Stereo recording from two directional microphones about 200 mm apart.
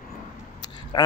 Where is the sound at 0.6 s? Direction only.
20° left (ahead or behind).